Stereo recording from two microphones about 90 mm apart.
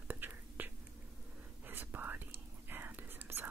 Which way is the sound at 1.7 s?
20° right (ahead or behind).